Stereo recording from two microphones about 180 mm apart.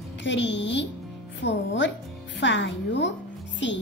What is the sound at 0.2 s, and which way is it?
A woman's voice, 85° left.